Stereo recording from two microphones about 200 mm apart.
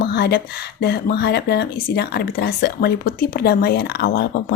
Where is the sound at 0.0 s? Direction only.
55° left (ahead or behind).